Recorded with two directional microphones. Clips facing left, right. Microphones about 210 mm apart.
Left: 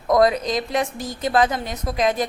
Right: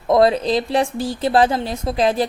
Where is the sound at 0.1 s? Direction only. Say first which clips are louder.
Right 3 dB; 30° right (ahead or behind).